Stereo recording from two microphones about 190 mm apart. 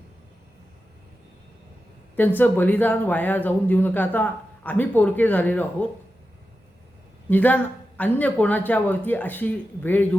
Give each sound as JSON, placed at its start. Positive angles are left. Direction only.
{"t": 2.1, "sound": "speech", "side_deg": 10}
{"t": 7.3, "sound": "speech", "side_deg": 10}